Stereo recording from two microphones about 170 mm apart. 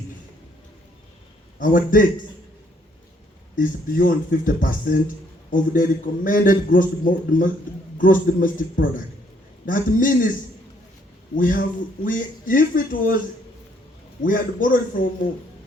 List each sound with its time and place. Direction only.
1.5 s a man's voice: 55° left (ahead or behind)
3.5 s a man's voice: 55° left (ahead or behind)
11.3 s a man's voice: 50° left (ahead or behind)
14.2 s a man's voice: 55° left (ahead or behind)